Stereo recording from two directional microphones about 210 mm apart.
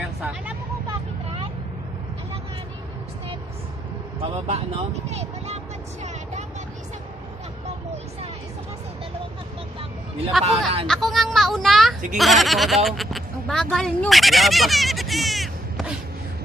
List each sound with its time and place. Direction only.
4.2 s speech: 30° right (ahead or behind)
10.4 s speech: 25° right (ahead or behind)
10.9 s a sound: centre (ahead or behind)
12.2 s speech: centre (ahead or behind)